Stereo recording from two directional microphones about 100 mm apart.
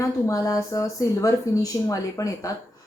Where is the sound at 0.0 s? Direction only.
35° left (ahead or behind).